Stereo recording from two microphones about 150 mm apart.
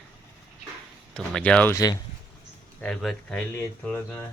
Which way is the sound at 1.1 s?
5° left (ahead or behind).